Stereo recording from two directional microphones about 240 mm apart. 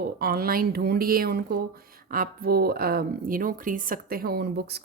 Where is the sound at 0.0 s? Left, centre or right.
Right.